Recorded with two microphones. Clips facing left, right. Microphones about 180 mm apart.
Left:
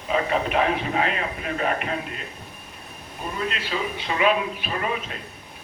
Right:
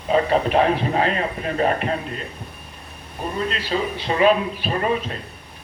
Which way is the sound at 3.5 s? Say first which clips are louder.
Right 4 dB; 35° right (ahead or behind).